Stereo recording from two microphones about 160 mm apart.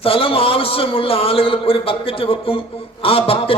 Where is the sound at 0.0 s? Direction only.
35° left (ahead or behind).